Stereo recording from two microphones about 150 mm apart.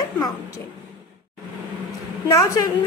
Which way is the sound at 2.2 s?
25° left (ahead or behind).